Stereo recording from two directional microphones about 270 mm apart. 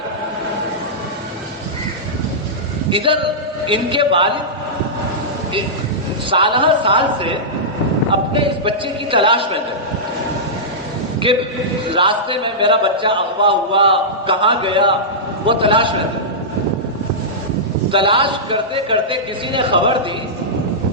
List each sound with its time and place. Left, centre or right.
2.9 s a man's voice: centre
6.3 s a man's voice: centre
11.2 s a man's voice: centre
17.9 s a man's voice: centre